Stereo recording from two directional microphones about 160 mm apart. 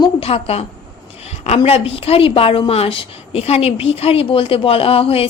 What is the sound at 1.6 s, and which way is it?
A woman's voice, 35° left (ahead or behind).